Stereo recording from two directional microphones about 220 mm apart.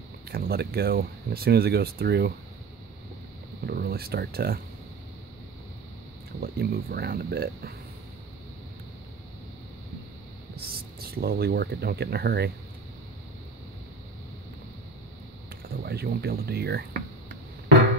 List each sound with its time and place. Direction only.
0.3 s speech: 45° right (ahead or behind)
3.6 s speech: 45° right (ahead or behind)
6.4 s speech: 45° right (ahead or behind)
10.5 s speech: 45° right (ahead or behind)
15.8 s speech: 45° right (ahead or behind)